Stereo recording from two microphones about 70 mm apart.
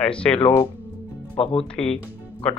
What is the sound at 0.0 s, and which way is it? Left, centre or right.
Speech, centre.